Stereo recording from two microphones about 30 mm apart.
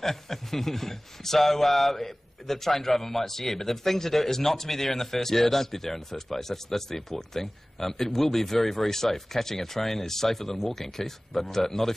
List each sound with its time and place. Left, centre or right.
0.0 s a man's voice: centre